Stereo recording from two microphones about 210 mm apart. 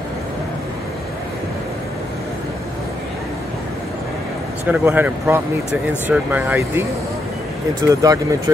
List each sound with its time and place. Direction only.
4.6 s speech: 10° right (ahead or behind)
7.9 s speech: 15° right (ahead or behind)